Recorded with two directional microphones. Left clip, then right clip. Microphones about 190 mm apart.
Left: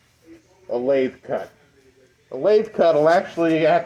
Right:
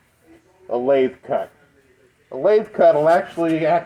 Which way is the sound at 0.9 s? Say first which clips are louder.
Right 3 dB; centre (ahead or behind).